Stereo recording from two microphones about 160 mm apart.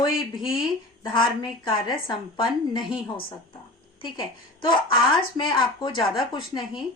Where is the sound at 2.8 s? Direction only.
5° right (ahead or behind).